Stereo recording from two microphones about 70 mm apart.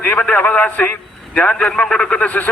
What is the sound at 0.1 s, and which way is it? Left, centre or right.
A man's voice, centre.